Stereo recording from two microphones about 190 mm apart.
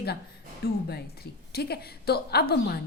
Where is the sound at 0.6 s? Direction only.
60° left (ahead or behind).